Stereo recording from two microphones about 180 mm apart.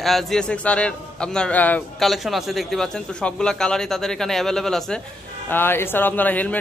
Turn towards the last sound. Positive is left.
turn(degrees=10)  # may be behind; listen again after turning